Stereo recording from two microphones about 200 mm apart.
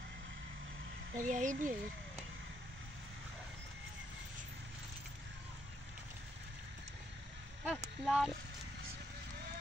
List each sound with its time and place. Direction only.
1.2 s speech: 40° right (ahead or behind)
7.6 s speech: 5° right (ahead or behind)